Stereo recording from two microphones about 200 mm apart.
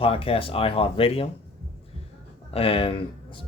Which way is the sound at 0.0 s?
30° left (ahead or behind).